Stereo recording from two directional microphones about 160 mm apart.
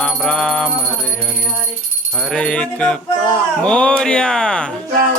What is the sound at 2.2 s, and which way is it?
Speech, 5° left (ahead or behind).